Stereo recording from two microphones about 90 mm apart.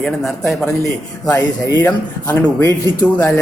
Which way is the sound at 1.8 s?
25° left (ahead or behind).